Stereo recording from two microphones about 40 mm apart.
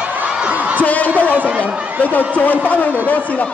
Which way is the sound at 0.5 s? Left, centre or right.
Right.